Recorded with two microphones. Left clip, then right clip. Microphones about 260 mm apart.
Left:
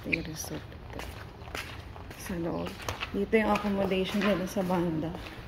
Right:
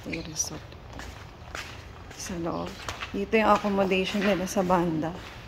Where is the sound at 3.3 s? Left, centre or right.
Centre.